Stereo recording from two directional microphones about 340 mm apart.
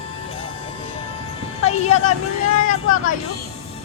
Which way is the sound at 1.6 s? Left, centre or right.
Centre.